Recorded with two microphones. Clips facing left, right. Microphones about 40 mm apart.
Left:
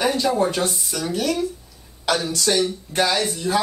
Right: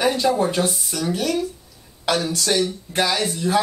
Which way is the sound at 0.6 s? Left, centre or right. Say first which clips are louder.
Right 1 dB; centre.